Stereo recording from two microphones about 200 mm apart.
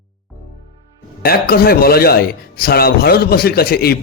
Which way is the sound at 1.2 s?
50° left (ahead or behind).